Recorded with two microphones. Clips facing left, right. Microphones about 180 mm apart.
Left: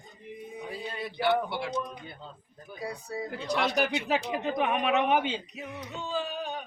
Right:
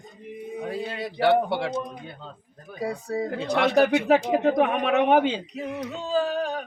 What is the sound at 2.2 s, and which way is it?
Speech, 90° right.